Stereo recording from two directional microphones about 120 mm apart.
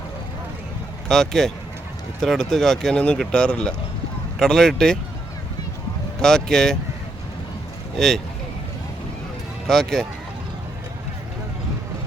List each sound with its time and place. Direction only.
1.0 s speech: 5° left (ahead or behind)
6.2 s speech: 5° left (ahead or behind)
7.9 s speech: centre (ahead or behind)
9.6 s speech: 5° left (ahead or behind)